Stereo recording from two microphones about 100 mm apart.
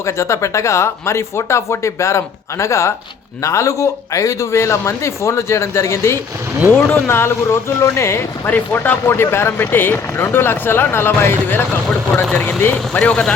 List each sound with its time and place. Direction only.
0.0 s speech: 30° left (ahead or behind); by 13.3 s 5° left (ahead or behind)